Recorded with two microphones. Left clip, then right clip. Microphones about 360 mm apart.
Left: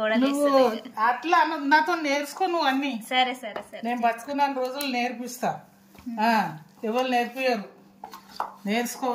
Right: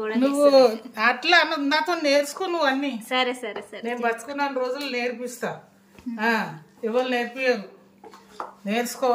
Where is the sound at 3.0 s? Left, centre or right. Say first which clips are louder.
Even; centre.